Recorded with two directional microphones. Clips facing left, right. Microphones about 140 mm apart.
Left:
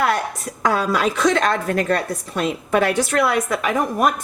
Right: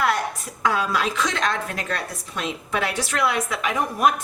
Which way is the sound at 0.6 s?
45° left (ahead or behind).